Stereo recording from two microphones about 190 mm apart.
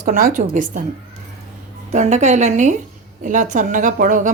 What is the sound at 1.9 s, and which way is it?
A woman's voice, 40° right (ahead or behind).